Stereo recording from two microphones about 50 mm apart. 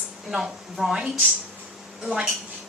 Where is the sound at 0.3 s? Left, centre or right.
Centre.